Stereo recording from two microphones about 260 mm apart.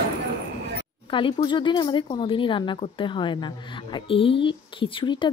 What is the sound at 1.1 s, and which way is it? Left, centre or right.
Speech, centre.